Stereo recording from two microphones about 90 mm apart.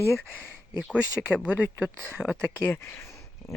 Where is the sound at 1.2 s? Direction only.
5° right (ahead or behind).